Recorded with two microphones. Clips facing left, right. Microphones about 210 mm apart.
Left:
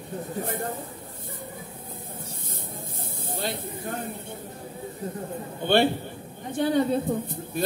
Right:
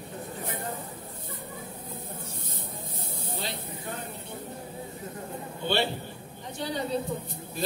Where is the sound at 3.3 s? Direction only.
50° left (ahead or behind).